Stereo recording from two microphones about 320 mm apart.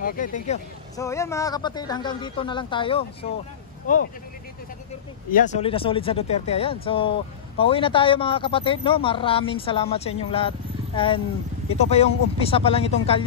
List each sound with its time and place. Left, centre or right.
0.0 s speech: left
0.9 s speech: centre; by 4.0 s left
5.3 s speech: left